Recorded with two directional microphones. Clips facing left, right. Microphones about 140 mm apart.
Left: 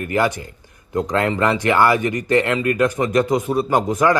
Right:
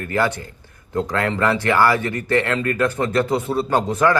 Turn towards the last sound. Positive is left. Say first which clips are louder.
# left 1 dB
turn(degrees=10)  # may be behind; listen again after turning